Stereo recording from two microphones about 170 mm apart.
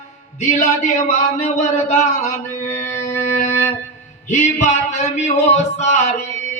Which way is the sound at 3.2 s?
45° left (ahead or behind).